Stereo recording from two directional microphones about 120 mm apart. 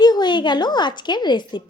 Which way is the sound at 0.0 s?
35° left (ahead or behind).